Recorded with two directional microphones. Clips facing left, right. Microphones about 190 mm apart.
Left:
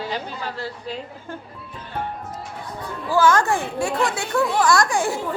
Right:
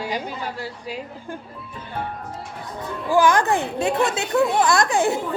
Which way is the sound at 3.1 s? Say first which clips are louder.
Even; 15° right (ahead or behind).